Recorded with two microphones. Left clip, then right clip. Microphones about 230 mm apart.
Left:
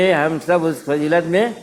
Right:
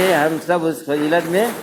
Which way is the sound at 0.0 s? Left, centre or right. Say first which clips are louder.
Even; left.